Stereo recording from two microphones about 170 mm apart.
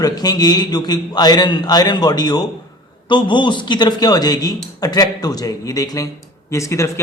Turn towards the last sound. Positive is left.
turn(degrees=15)  # may be behind; listen again after turning